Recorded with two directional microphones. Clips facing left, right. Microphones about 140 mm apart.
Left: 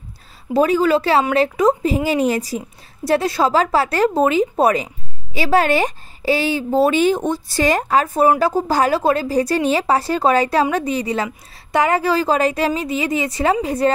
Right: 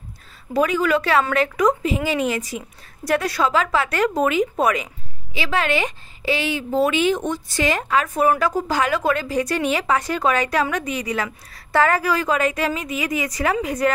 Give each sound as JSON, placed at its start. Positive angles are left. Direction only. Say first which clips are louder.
{"t": 0.5, "sound": "speech", "louder": "left 4 dB", "side_deg": 30}
{"t": 11.5, "sound": "a woman's voice", "louder": "left 1 dB", "side_deg": 20}